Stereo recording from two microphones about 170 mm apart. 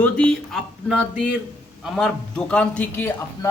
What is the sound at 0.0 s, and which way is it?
Speech, 5° left (ahead or behind).